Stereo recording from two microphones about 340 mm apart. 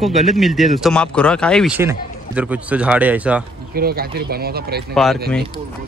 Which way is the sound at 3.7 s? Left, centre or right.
Right.